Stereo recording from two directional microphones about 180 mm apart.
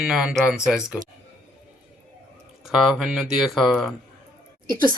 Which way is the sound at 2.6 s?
Centre (ahead or behind).